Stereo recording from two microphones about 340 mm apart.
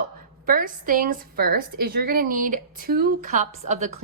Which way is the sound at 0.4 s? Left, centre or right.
Right.